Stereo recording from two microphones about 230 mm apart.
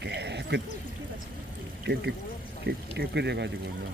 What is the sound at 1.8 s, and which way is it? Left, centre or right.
Speech, right.